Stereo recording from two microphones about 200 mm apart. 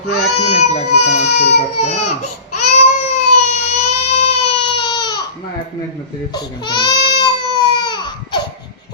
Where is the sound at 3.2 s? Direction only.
35° left (ahead or behind).